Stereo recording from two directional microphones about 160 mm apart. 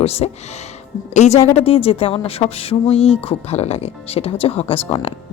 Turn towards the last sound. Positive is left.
turn(degrees=35)  # may be behind; listen again after turning